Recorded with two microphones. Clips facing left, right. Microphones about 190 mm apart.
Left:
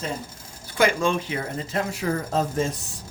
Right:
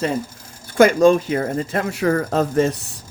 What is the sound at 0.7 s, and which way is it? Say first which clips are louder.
Speech: right 9 dB; 45° right (ahead or behind).